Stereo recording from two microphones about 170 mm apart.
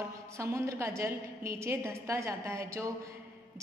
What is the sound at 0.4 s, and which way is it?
A woman's voice, 15° right (ahead or behind).